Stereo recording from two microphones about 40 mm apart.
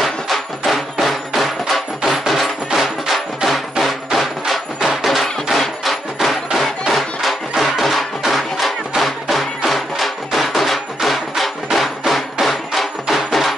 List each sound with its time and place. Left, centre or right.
0.0 s music: centre
6.2 s a sound: centre
7.6 s music: centre